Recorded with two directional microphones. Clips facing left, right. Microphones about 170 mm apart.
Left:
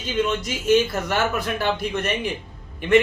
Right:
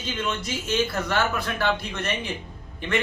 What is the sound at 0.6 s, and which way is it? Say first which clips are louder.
Speech: left 7 dB; 15° left (ahead or behind).